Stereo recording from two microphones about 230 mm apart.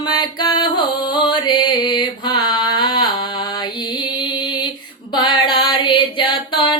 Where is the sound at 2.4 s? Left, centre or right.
Centre.